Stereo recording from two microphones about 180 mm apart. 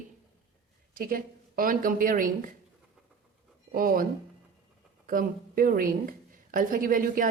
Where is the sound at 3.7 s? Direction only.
55° right (ahead or behind).